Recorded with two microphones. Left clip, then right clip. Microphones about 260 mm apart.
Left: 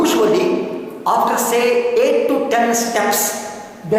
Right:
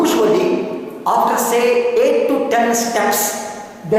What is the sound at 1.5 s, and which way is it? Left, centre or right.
A woman's voice, centre.